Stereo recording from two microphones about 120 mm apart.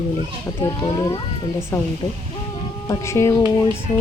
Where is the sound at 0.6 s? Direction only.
40° left (ahead or behind).